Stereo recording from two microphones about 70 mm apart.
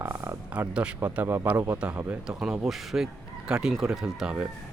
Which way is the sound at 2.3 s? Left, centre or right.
Centre.